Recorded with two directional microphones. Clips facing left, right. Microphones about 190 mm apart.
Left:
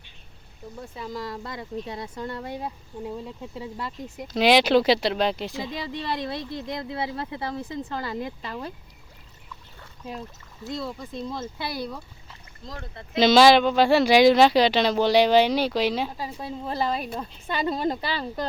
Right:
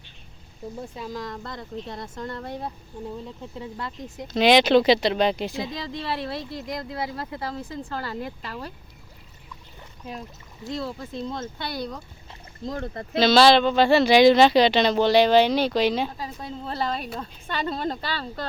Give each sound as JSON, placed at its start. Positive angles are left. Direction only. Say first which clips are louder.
{"t": 1.1, "sound": "speech", "louder": "left 4 dB", "side_deg": 5}
{"t": 5.8, "sound": "speech", "louder": "even", "side_deg": 20}
{"t": 10.7, "sound": "speech", "louder": "right 1 dB", "side_deg": 0}
{"t": 12.6, "sound": "speech", "louder": "right 9 dB", "side_deg": -45}
{"t": 13.1, "sound": "speech", "louder": "left 1 dB", "side_deg": 15}